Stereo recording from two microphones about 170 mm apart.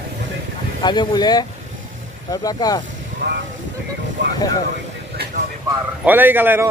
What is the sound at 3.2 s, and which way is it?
Speech, 80° right.